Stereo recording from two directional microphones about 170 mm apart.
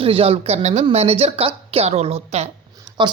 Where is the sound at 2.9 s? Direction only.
25° right (ahead or behind).